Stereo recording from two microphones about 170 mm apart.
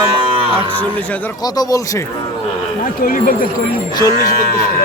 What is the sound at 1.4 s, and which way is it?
Speech, 20° left (ahead or behind).